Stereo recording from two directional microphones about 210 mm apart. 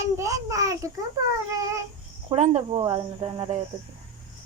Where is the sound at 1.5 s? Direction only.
15° right (ahead or behind).